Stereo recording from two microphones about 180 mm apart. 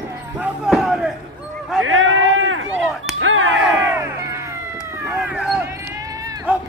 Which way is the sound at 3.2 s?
90° right.